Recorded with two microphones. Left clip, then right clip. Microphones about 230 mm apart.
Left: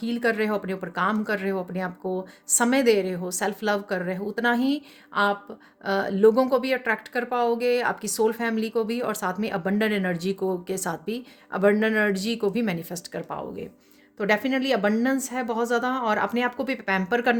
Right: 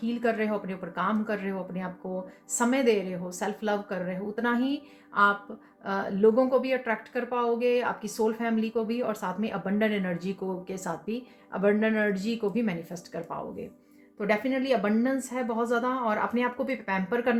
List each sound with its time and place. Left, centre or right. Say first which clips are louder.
0.0 s speech: left 3 dB; left